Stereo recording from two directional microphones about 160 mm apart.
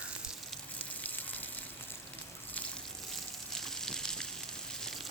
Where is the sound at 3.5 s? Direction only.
5° left (ahead or behind).